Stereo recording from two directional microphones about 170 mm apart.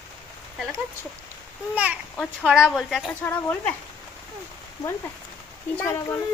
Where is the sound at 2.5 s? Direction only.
5° right (ahead or behind).